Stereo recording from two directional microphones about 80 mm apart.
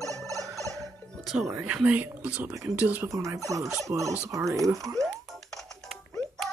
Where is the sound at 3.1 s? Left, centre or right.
Right.